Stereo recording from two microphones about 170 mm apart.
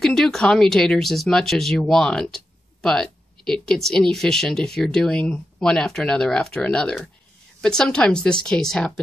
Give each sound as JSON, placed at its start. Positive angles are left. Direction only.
{"t": 0.0, "sound": "speech", "side_deg": 5}